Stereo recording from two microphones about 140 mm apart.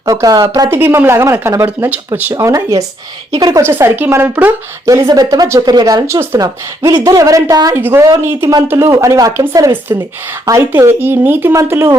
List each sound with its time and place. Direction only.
0.0 s speech: 25° right (ahead or behind)
0.7 s speech: 15° right (ahead or behind)
2.3 s speech: 20° right (ahead or behind)
3.6 s speech: 15° right (ahead or behind)
5.0 s speech: 30° right (ahead or behind)